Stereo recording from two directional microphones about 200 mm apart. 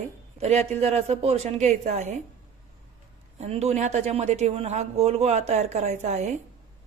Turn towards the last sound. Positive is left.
turn(degrees=-35)  # may be behind; listen again after turning